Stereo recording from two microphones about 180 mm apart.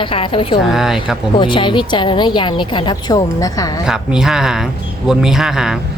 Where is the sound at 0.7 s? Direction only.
Centre (ahead or behind).